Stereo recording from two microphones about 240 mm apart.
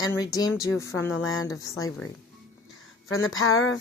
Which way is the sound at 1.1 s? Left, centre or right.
Left.